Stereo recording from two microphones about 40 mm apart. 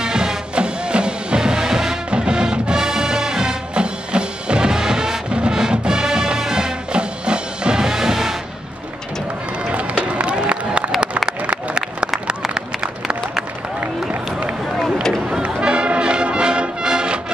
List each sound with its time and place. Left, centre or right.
0.0 s music: centre
2.0 s music: right
9.7 s run: right
11.2 s a sound: right
12.3 s run: right
15.2 s music: right